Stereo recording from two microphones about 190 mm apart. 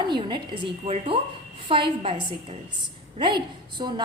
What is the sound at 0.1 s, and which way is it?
A woman's voice, 25° right (ahead or behind).